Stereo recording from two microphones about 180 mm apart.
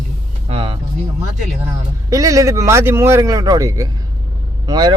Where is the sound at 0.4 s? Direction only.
30° right (ahead or behind).